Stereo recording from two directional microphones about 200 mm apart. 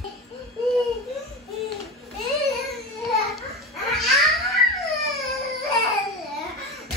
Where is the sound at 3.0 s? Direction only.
Centre (ahead or behind).